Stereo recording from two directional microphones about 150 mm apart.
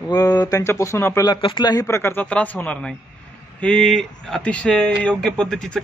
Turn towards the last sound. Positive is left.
turn(degrees=5)  # may be behind; listen again after turning